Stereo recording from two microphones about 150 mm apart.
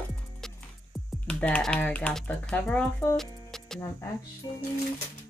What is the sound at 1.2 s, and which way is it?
Speech, 10° left (ahead or behind).